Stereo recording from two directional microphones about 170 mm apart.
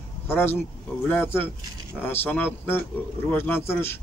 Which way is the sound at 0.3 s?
10° left (ahead or behind).